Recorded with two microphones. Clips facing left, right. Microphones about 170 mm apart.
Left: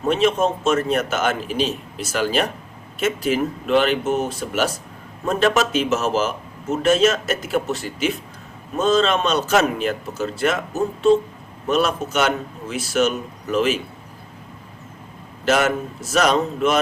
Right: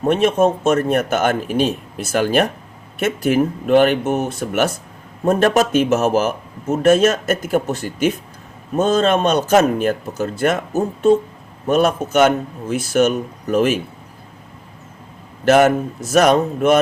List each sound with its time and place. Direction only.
0.1 s a man's voice: 50° right (ahead or behind)
11.7 s a man's voice: 50° right (ahead or behind)
15.4 s a man's voice: 55° right (ahead or behind)